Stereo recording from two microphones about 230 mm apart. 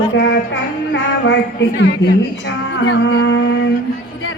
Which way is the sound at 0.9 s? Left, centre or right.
Left.